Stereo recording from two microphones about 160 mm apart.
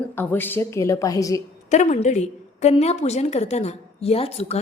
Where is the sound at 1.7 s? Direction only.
45° left (ahead or behind).